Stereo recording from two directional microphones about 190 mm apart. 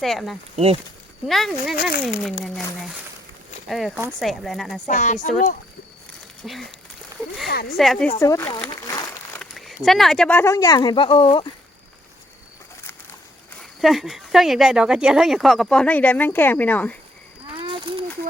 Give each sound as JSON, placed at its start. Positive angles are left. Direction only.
{"t": 0.0, "sound": "speech", "side_deg": 0}
{"t": 0.5, "sound": "speech", "side_deg": -30}
{"t": 1.3, "sound": "speech", "side_deg": 0}
{"t": 1.7, "sound": "speech", "side_deg": 55}
{"t": 2.0, "sound": "speech", "side_deg": 0}
{"t": 4.9, "sound": "speech", "side_deg": 40}
{"t": 6.4, "sound": "speech", "side_deg": 0}
{"t": 7.4, "sound": "speech", "side_deg": 55}
{"t": 7.8, "sound": "speech", "side_deg": 5}
{"t": 8.2, "sound": "speech", "side_deg": 15}
{"t": 8.6, "sound": "crumpling", "side_deg": 15}
{"t": 9.4, "sound": "speech", "side_deg": 0}
{"t": 13.6, "sound": "speech", "side_deg": 0}
{"t": 17.7, "sound": "a sound", "side_deg": -25}